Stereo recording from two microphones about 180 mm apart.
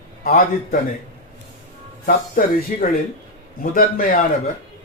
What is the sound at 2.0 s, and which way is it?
Speech, 50° left (ahead or behind).